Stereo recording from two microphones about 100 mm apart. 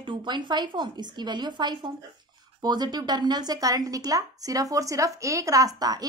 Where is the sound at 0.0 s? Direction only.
50° right (ahead or behind).